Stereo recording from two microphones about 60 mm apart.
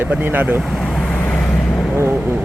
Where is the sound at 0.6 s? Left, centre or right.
Centre.